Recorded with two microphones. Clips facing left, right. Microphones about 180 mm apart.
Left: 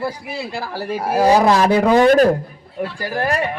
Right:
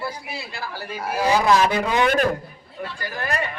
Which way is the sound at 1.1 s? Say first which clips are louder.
Left 5 dB; 35° left (ahead or behind).